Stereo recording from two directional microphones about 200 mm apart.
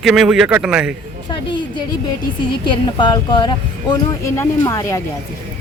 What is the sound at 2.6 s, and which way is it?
Speech, 25° left (ahead or behind).